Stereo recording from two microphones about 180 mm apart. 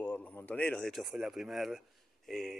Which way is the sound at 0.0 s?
10° left (ahead or behind).